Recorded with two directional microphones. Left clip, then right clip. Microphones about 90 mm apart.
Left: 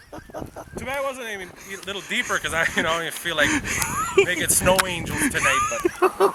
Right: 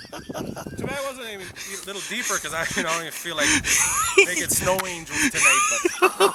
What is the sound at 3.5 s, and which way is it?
Speech, 25° right (ahead or behind).